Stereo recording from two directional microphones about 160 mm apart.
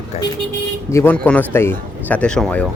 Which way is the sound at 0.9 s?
15° left (ahead or behind).